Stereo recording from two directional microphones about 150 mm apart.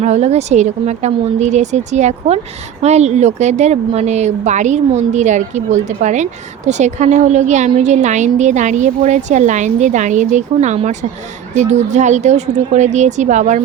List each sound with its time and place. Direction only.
0.0 s a woman's voice: 45° right (ahead or behind)